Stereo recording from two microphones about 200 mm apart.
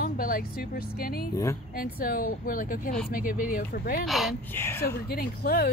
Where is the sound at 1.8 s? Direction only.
45° left (ahead or behind).